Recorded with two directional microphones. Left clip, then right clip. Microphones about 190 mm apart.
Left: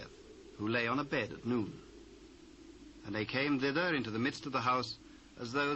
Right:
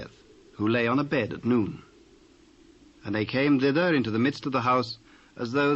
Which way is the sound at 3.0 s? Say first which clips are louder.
Right 9 dB; 40° right (ahead or behind).